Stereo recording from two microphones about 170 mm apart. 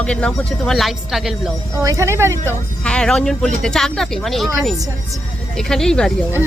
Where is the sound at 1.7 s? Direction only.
15° right (ahead or behind).